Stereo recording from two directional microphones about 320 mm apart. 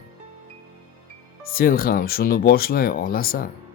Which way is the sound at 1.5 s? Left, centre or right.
Left.